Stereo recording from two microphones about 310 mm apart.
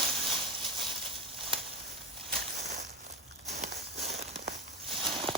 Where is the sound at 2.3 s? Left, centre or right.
Right.